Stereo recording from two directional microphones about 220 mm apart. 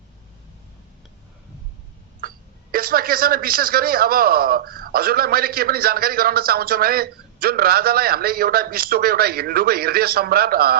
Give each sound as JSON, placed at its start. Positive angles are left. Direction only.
{"t": 2.7, "sound": "a man's voice", "side_deg": -40}